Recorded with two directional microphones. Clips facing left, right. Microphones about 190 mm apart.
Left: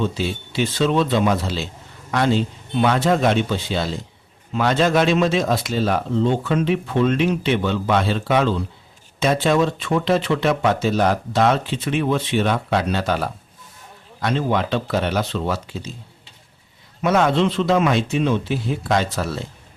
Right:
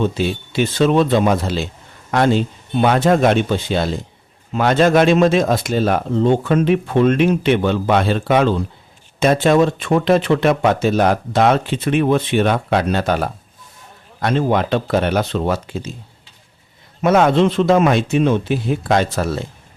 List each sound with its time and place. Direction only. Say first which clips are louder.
0.0 s speech: right 4 dB; 55° right (ahead or behind)
17.0 s speech: right 4 dB; 50° right (ahead or behind)